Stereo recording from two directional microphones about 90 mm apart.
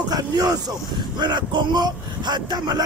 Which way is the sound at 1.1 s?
55° right (ahead or behind).